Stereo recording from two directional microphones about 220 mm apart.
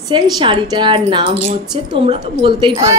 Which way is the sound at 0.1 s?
20° right (ahead or behind).